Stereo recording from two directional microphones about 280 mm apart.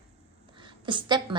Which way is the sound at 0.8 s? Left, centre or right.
Centre.